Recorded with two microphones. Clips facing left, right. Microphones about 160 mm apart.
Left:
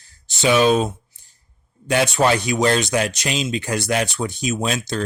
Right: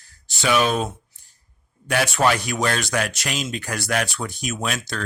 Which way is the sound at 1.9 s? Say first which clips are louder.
Left 3 dB; 20° left (ahead or behind).